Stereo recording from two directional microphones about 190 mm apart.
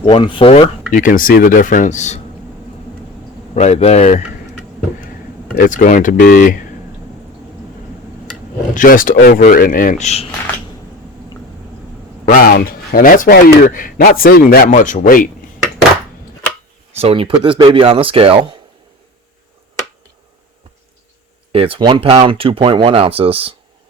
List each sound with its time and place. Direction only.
0.0 s speech: 25° left (ahead or behind)
0.9 s speech: 45° left (ahead or behind)
3.5 s a man's voice: 35° left (ahead or behind)
5.5 s speech: 45° left (ahead or behind)
8.7 s speech: 45° left (ahead or behind)
12.5 s speech: 50° left (ahead or behind)
16.9 s speech: 30° right (ahead or behind)
21.5 s speech: 30° right (ahead or behind)